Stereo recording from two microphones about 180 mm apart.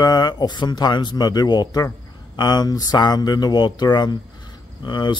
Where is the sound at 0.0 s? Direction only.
20° left (ahead or behind).